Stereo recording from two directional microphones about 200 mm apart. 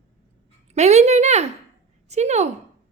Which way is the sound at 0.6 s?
35° right (ahead or behind).